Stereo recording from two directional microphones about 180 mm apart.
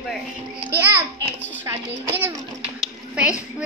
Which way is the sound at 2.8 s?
5° right (ahead or behind).